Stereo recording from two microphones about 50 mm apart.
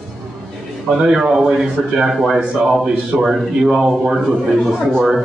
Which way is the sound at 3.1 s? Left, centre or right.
Right.